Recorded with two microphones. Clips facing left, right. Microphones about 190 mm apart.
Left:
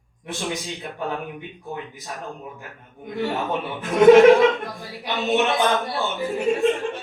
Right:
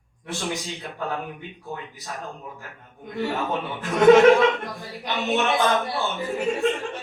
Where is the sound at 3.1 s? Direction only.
Centre (ahead or behind).